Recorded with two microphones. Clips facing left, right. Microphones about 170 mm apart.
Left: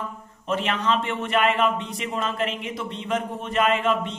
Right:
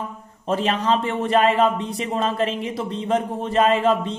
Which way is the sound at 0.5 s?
30° right (ahead or behind).